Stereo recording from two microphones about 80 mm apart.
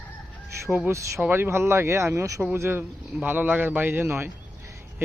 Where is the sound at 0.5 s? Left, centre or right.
Right.